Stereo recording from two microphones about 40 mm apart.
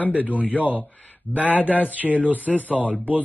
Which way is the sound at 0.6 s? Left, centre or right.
Right.